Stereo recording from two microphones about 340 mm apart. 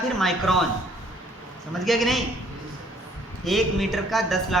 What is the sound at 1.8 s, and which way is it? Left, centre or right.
Speech, centre.